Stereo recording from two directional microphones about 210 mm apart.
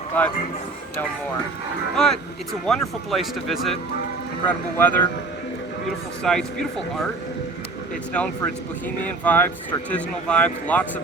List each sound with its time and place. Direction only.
0.1 s speech: 5° left (ahead or behind)
2.0 s speech: centre (ahead or behind)
6.2 s speech: 5° left (ahead or behind)
9.0 s speech: 10° left (ahead or behind)